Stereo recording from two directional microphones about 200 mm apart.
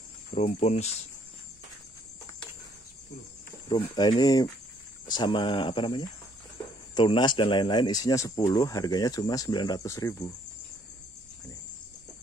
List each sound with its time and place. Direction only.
0.3 s speech: 35° left (ahead or behind)
3.6 s speech: 20° left (ahead or behind)